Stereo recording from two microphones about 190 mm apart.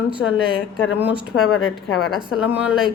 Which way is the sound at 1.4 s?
90° left.